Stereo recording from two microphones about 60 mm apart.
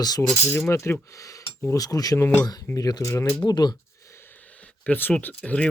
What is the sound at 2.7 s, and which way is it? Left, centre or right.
Speech, left.